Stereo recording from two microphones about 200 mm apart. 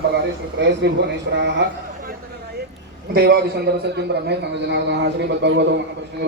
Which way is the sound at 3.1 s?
55° right (ahead or behind).